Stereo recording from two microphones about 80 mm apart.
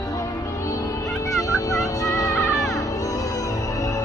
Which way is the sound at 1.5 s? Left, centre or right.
Left.